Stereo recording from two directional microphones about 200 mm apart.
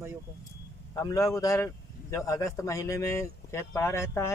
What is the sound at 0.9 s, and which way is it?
A man's voice, 15° left (ahead or behind).